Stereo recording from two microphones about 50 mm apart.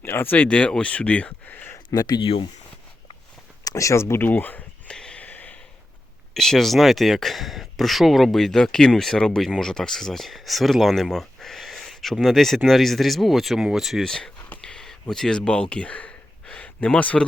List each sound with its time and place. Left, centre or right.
0.0 s speech: left
0.4 s speech: left
3.8 s speech: left
4.2 s speech: left
4.9 s a sound: centre
5.2 s a sound: left
6.3 s speech: centre
14.0 s speech: centre
14.6 s a sound: centre
15.4 s speech: centre